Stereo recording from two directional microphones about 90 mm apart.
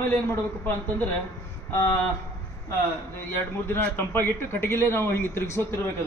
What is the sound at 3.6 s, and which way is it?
A man's voice, 25° left (ahead or behind).